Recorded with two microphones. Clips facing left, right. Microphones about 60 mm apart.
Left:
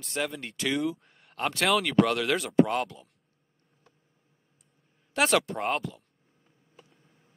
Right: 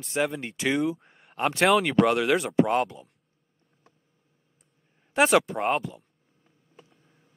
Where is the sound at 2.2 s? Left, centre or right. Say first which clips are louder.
Right 1 dB; centre.